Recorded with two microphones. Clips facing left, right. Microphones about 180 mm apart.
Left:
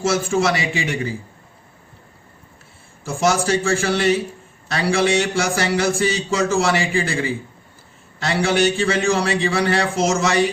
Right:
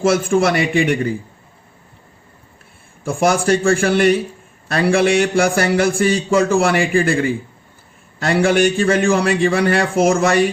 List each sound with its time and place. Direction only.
0.0 s a man's voice: 55° right (ahead or behind)
3.0 s a man's voice: 55° right (ahead or behind)